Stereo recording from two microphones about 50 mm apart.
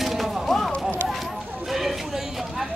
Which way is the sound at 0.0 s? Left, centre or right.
Centre.